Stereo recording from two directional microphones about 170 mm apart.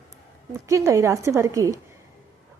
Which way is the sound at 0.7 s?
20° right (ahead or behind).